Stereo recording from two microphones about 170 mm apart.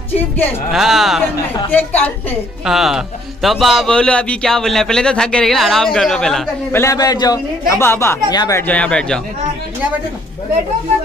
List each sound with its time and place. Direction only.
0.7 s a man's voice: centre (ahead or behind)
1.7 s speech: 10° left (ahead or behind)
2.6 s a man's voice: centre (ahead or behind)
6.7 s a man's voice: 15° left (ahead or behind)